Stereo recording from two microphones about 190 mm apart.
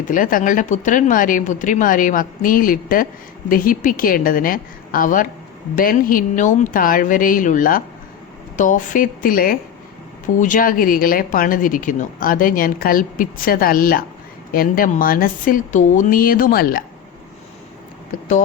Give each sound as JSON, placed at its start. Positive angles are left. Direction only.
{"t": 0.1, "sound": "a woman's voice", "side_deg": 45}